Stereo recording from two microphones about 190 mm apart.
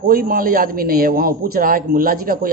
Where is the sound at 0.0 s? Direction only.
50° right (ahead or behind).